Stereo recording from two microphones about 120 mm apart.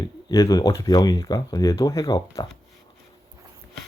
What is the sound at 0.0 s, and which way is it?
Speech, 30° left (ahead or behind).